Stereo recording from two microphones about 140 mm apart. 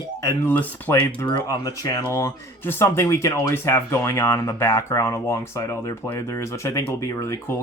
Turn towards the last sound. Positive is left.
turn(degrees=20)  # may be behind; listen again after turning